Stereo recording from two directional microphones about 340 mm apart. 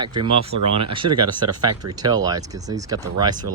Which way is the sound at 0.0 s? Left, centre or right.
Centre.